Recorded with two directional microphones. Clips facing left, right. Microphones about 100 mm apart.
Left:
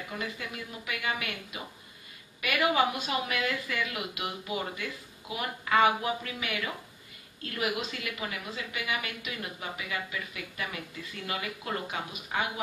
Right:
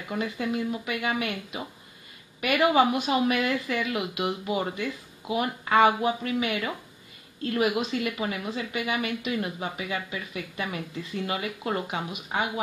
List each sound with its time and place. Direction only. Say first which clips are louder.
0.2 s speech: right 9 dB; 30° right (ahead or behind)